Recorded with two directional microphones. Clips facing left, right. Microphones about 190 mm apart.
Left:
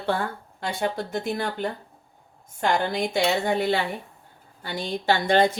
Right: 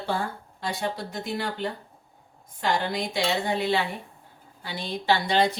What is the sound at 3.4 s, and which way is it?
A woman's voice, 50° left (ahead or behind).